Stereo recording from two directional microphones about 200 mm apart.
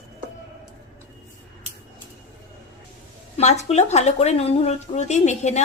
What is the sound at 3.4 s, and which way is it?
Speech, 35° left (ahead or behind).